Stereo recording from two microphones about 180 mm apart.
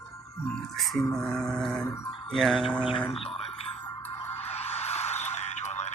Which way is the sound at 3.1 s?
30° left (ahead or behind).